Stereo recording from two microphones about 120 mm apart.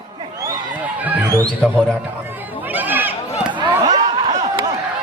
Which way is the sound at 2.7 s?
15° right (ahead or behind).